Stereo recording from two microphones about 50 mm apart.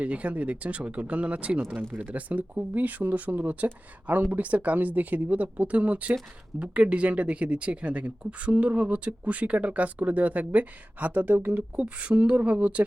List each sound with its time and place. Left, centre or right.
0.0 s speech: right
11.3 s speech: right
11.8 s speech: right